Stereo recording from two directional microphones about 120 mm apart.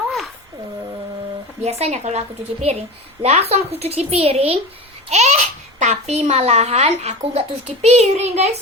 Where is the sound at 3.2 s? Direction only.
60° right (ahead or behind).